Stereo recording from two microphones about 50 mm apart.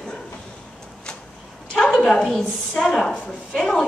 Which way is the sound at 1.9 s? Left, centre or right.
Centre.